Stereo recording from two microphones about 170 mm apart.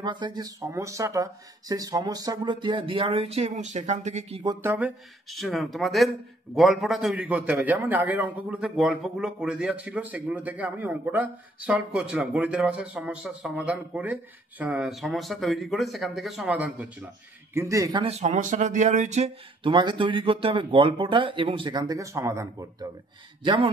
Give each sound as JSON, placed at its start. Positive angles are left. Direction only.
{"t": 0.0, "sound": "speech", "side_deg": -25}
{"t": 4.6, "sound": "a man's voice", "side_deg": -10}
{"t": 17.6, "sound": "speech", "side_deg": -20}
{"t": 18.0, "sound": "speech", "side_deg": -40}
{"t": 19.7, "sound": "speech", "side_deg": -25}
{"t": 23.4, "sound": "speech", "side_deg": -30}